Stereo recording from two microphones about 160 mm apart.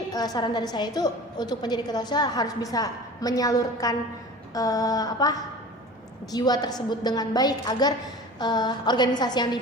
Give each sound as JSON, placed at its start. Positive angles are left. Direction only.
{"t": 0.1, "sound": "a woman's voice", "side_deg": 25}